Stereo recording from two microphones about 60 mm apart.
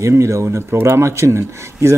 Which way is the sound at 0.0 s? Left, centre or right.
Right.